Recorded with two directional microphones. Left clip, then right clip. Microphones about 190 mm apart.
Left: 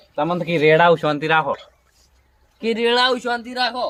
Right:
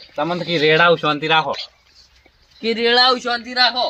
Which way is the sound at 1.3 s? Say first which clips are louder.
Right 1 dB; 5° left (ahead or behind).